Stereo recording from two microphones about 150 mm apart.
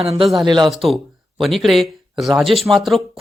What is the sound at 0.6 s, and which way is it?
Speech, centre (ahead or behind).